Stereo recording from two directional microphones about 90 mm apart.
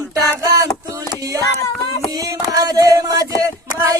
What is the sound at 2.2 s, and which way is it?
Music, 40° right (ahead or behind).